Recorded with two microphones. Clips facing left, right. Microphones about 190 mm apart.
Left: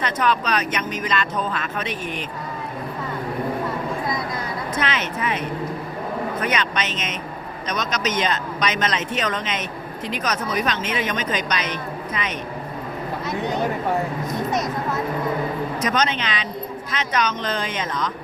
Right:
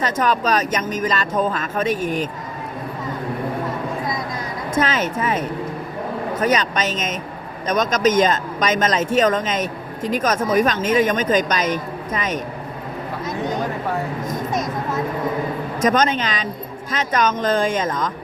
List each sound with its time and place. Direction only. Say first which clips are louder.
0.0 s speech: right 2 dB; 45° right (ahead or behind)
4.7 s speech: right 7 dB; 45° right (ahead or behind)
15.8 s speech: right 7 dB; 45° right (ahead or behind)